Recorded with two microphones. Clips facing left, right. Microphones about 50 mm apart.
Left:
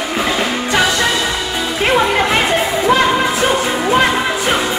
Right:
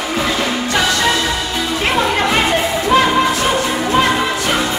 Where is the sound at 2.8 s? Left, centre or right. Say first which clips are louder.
Even; left.